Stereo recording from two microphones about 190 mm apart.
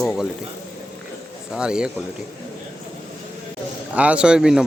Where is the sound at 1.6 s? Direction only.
5° right (ahead or behind).